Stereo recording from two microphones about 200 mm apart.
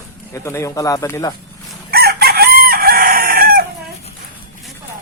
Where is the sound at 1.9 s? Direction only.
50° right (ahead or behind).